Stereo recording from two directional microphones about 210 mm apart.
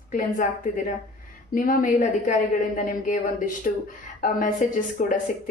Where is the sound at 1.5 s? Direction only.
40° left (ahead or behind).